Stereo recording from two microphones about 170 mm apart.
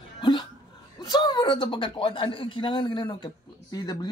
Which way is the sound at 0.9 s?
25° left (ahead or behind).